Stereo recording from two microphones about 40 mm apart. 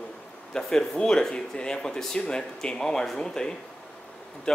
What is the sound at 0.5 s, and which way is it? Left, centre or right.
Speech, centre.